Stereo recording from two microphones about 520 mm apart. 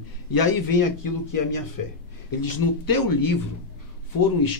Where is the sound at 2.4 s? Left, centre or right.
Left.